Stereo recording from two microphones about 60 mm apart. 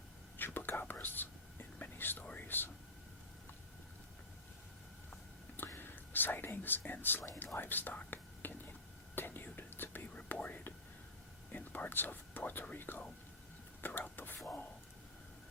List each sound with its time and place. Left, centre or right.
0.3 s whispering: left
2.2 s speech: left
5.6 s speech: left
9.1 s whispering: left
12.6 s speech: left
13.8 s whispering: left